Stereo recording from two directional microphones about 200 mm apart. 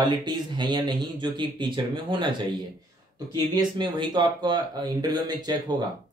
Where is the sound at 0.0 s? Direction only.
20° right (ahead or behind).